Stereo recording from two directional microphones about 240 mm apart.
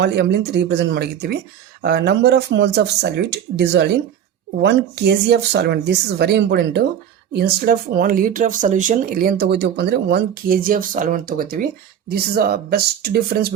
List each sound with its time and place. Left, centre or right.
0.0 s speech: right